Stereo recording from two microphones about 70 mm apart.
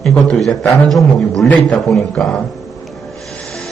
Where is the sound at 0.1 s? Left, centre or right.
Centre.